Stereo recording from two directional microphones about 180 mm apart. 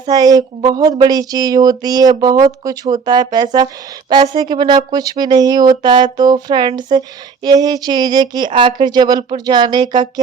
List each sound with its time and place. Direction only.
0.0 s speech: 20° right (ahead or behind)